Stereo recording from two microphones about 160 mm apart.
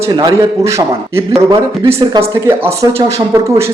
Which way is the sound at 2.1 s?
20° right (ahead or behind).